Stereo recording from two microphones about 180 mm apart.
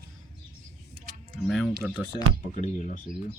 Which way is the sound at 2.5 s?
45° left (ahead or behind).